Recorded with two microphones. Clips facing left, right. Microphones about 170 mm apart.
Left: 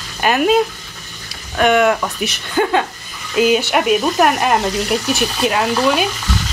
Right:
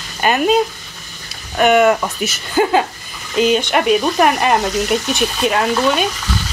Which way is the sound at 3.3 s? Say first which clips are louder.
Even; 5° left (ahead or behind).